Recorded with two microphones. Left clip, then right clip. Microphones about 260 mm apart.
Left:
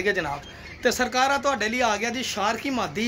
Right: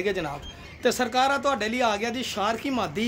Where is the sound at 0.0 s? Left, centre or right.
Centre.